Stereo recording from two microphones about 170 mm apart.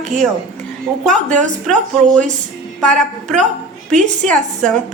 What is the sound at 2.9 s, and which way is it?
Speech, 45° right (ahead or behind).